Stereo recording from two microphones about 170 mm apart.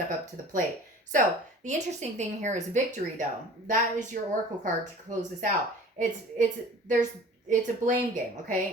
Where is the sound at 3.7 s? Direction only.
50° right (ahead or behind).